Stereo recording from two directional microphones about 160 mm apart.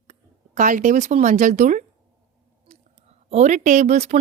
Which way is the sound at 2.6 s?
40° right (ahead or behind).